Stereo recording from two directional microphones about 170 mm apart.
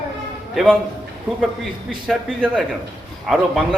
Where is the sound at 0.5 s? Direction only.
5° left (ahead or behind).